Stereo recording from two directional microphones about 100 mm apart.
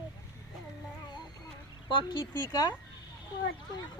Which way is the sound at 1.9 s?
55° left (ahead or behind).